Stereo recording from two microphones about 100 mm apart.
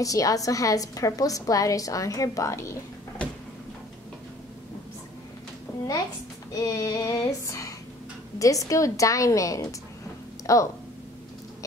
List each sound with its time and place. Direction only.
0.0 s a woman's voice: 35° left (ahead or behind)
5.7 s a sound: 25° left (ahead or behind)
6.5 s a woman's voice: 35° left (ahead or behind)